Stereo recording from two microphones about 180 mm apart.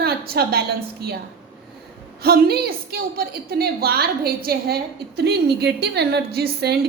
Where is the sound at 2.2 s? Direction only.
55° right (ahead or behind).